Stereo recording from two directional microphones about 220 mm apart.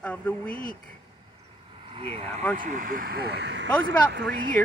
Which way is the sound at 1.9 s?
25° right (ahead or behind).